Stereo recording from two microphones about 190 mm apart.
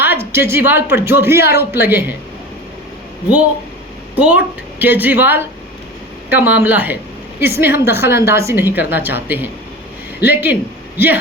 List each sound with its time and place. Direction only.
0.0 s a woman's voice: 10° right (ahead or behind)
1.4 s speech: 55° left (ahead or behind)
1.7 s a woman's voice: 10° right (ahead or behind)
4.1 s a woman's voice: 5° right (ahead or behind)